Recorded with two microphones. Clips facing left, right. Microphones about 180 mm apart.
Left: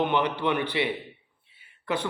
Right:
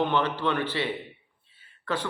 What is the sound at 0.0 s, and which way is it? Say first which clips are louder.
A man's voice: left 1 dB; 15° left (ahead or behind).